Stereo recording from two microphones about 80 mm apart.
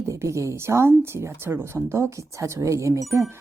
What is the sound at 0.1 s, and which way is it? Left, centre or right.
A woman's voice, right.